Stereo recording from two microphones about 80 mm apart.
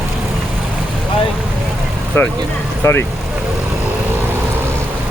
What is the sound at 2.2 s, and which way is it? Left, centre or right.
Speech, left.